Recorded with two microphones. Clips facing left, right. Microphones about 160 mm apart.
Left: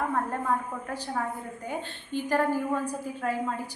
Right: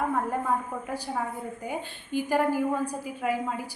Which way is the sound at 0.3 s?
10° right (ahead or behind).